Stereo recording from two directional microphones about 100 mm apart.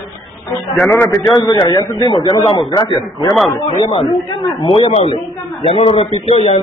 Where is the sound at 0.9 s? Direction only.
25° left (ahead or behind).